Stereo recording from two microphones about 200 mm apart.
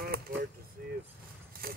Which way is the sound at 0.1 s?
50° right (ahead or behind).